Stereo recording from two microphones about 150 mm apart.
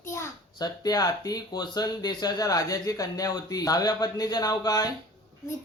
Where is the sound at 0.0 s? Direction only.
20° left (ahead or behind).